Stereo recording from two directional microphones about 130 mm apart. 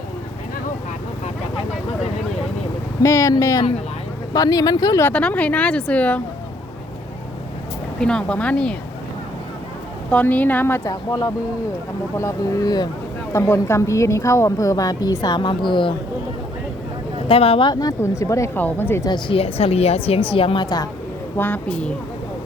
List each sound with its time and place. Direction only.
3.0 s a woman's voice: 25° left (ahead or behind)
5.0 s speech: 10° left (ahead or behind)
7.9 s speech: 5° left (ahead or behind)
10.1 s speech: 10° left (ahead or behind)
10.8 s a woman's voice: 30° left (ahead or behind)
17.2 s a woman's voice: 45° left (ahead or behind); by 19.0 s 15° left (ahead or behind)
19.0 s speech: 35° left (ahead or behind)
19.4 s a woman's voice: 50° left (ahead or behind)
21.3 s speech: 15° left (ahead or behind)